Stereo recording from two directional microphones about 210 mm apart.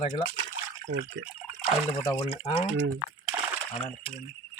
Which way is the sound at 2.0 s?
20° left (ahead or behind).